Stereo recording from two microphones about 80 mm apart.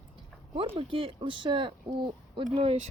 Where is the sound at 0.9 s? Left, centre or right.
Right.